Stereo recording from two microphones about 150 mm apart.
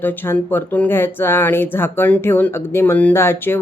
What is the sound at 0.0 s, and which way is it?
Speech, 15° left (ahead or behind).